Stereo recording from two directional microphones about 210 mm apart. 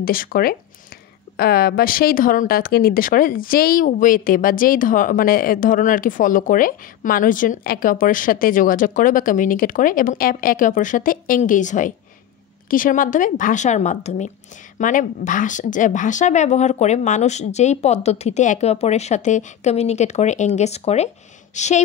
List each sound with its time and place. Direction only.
0.0 s speech: 45° left (ahead or behind)